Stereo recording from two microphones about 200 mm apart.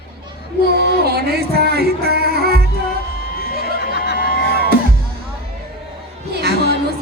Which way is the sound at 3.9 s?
55° left (ahead or behind).